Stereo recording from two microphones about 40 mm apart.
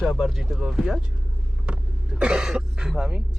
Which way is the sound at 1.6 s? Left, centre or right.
Right.